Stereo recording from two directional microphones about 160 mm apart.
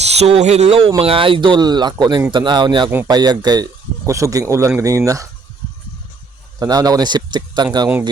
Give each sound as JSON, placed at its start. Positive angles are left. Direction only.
{"t": 0.0, "sound": "speech", "side_deg": -40}
{"t": 6.6, "sound": "speech", "side_deg": -25}